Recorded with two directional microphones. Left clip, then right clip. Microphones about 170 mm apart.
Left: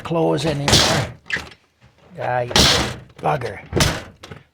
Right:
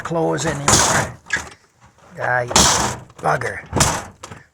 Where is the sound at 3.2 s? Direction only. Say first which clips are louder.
Right 2 dB; 30° left (ahead or behind).